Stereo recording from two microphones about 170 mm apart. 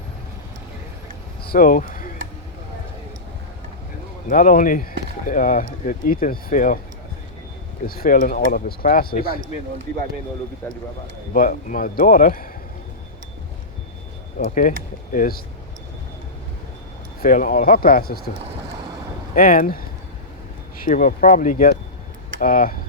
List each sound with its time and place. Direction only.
1.5 s speech: 55° left (ahead or behind)
4.3 s a man's voice: 55° left (ahead or behind)
7.9 s speech: 60° left (ahead or behind)
11.3 s a man's voice: 55° left (ahead or behind)
14.3 s a man's voice: 55° left (ahead or behind)
17.2 s speech: 55° left (ahead or behind)
19.3 s a man's voice: 55° left (ahead or behind)